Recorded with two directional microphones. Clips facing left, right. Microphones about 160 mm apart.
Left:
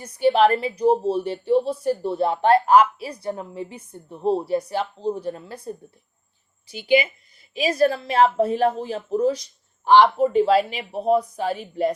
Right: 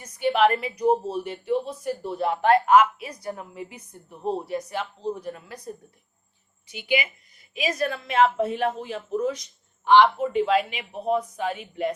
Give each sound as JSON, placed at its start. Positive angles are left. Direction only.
{"t": 0.0, "sound": "a woman's voice", "side_deg": 30}